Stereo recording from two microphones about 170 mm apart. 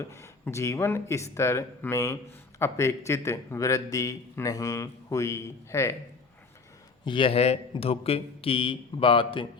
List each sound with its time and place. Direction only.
0.0 s a man's voice: 15° left (ahead or behind)
7.0 s a man's voice: 30° left (ahead or behind)